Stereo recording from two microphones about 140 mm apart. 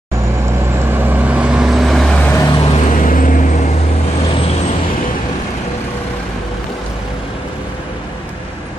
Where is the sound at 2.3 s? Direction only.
25° left (ahead or behind).